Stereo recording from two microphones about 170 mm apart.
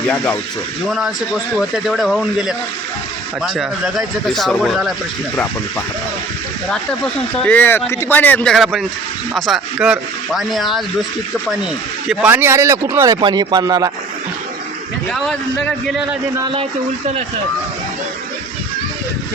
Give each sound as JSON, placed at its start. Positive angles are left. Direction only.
{"t": 0.9, "sound": "speech", "side_deg": -5}
{"t": 6.7, "sound": "speech", "side_deg": 5}
{"t": 8.5, "sound": "speech", "side_deg": 0}
{"t": 12.0, "sound": "speech", "side_deg": -10}
{"t": 15.1, "sound": "speech", "side_deg": 5}